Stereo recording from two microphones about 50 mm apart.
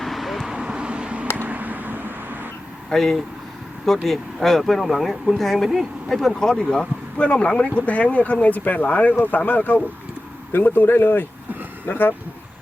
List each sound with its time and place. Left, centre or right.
0.0 s vehicle: centre
0.5 s vehicle: centre
1.4 s a sound: right
2.9 s speech: centre
6.5 s speech: centre; by 12.1 s left